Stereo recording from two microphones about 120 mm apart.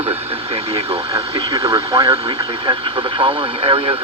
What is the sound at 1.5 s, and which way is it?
Speech, 35° right (ahead or behind).